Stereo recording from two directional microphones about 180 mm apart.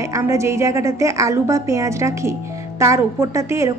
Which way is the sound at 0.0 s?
15° right (ahead or behind).